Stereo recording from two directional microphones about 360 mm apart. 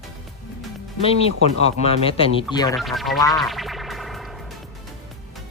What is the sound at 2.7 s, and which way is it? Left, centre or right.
Speech, centre.